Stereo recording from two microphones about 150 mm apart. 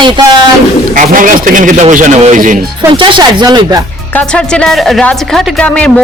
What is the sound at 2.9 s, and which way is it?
Speech, 35° right (ahead or behind).